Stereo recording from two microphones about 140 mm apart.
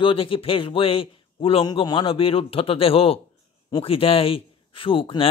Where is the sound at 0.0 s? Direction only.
40° left (ahead or behind).